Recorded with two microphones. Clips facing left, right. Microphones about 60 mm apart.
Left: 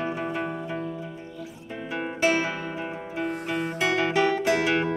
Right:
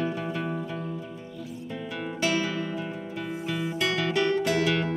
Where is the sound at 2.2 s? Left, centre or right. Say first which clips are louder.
Left 3 dB; left.